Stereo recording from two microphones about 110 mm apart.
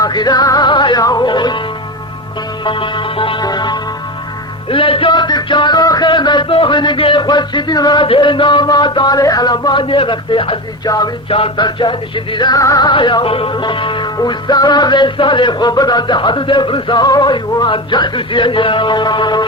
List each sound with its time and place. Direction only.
0.0 s music: 40° left (ahead or behind)
2.6 s music: 50° left (ahead or behind)
3.4 s music: 40° left (ahead or behind)
4.7 s music: 55° left (ahead or behind)
8.0 s music: 55° left (ahead or behind)
10.8 s music: 35° left (ahead or behind)
11.3 s music: 55° left (ahead or behind); by 12.9 s 35° left (ahead or behind)
12.9 s music: 45° left (ahead or behind)